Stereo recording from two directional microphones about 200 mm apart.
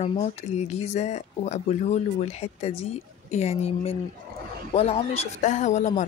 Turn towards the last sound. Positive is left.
turn(degrees=35)  # may be behind; listen again after turning